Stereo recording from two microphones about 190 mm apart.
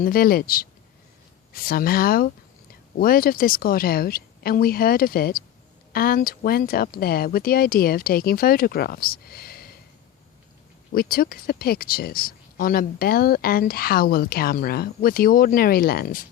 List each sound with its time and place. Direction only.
0.0 s speech: 50° left (ahead or behind)
10.9 s speech: 50° left (ahead or behind)